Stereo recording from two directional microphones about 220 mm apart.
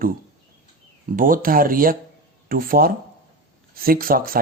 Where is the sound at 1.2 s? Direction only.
40° right (ahead or behind).